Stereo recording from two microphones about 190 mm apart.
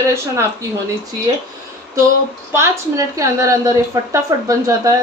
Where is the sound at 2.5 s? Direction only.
15° right (ahead or behind).